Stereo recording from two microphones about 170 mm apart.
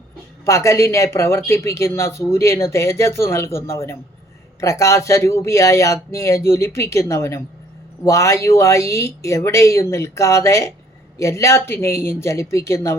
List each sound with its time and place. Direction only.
0.4 s speech: 20° left (ahead or behind)